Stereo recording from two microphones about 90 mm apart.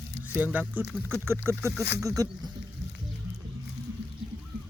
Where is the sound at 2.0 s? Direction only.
40° right (ahead or behind).